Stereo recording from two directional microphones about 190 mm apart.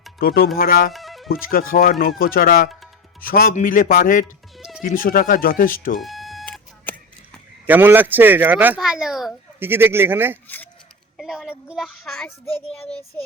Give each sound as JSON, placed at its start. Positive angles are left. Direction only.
{"t": 0.2, "sound": "speech", "side_deg": 50}
{"t": 0.9, "sound": "music", "side_deg": 0}
{"t": 1.3, "sound": "speech", "side_deg": 50}
{"t": 4.5, "sound": "music", "side_deg": 0}
{"t": 4.8, "sound": "speech", "side_deg": 45}
{"t": 6.0, "sound": "beep", "side_deg": 0}
{"t": 7.7, "sound": "speech", "side_deg": -10}
{"t": 11.2, "sound": "child singing", "side_deg": -5}
{"t": 11.7, "sound": "a child's voice", "side_deg": 0}
{"t": 12.0, "sound": "a child's voice", "side_deg": 10}